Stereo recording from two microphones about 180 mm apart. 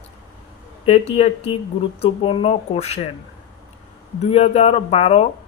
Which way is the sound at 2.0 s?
30° left (ahead or behind).